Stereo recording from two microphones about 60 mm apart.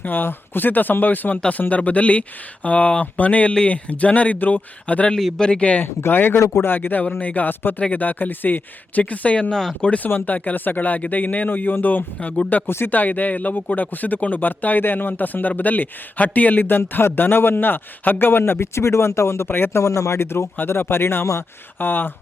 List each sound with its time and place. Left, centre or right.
0.0 s speech: left
5.1 s speech: centre
5.8 s speech: left
19.5 s speech: left